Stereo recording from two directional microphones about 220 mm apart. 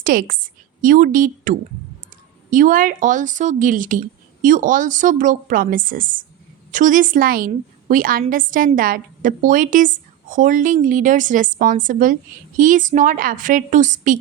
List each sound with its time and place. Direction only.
0.0 s a woman's voice: 40° right (ahead or behind)